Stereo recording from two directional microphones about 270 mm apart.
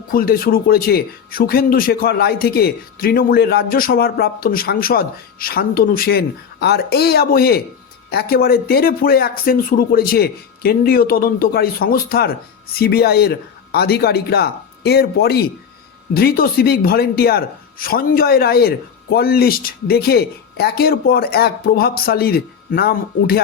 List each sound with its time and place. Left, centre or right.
0.1 s speech: left